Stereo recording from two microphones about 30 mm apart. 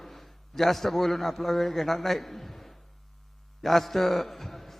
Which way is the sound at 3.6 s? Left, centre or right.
Centre.